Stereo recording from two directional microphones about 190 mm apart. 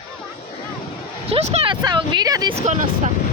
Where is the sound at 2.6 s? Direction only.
40° right (ahead or behind).